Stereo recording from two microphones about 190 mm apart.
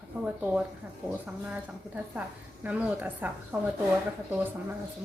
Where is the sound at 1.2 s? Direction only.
10° right (ahead or behind).